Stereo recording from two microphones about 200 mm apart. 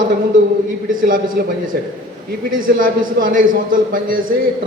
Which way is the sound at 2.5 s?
45° right (ahead or behind).